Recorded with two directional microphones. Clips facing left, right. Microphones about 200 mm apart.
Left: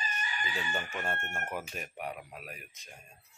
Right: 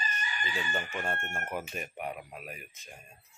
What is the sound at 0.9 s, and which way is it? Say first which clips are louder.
Speech: right 1 dB; centre (ahead or behind).